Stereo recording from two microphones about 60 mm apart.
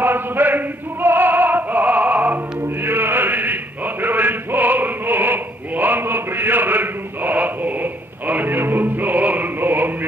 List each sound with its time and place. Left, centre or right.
0.0 s music: right
2.8 s chant: right